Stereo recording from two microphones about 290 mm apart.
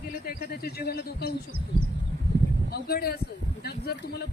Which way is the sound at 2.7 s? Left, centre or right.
Left.